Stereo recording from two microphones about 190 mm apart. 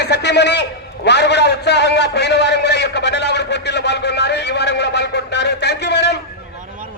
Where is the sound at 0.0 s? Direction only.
65° left (ahead or behind).